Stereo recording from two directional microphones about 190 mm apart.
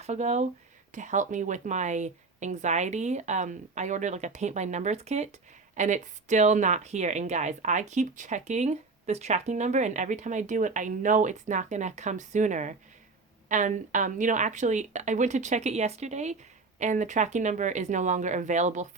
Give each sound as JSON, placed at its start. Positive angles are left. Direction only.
{"t": 0.0, "sound": "speech", "side_deg": -35}